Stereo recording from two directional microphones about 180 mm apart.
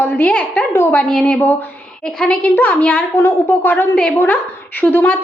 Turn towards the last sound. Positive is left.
turn(degrees=10)  # may be behind; listen again after turning